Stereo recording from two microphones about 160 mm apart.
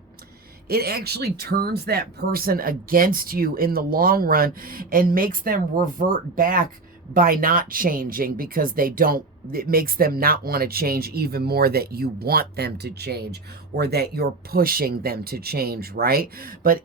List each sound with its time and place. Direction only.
0.7 s speech: 75° right (ahead or behind)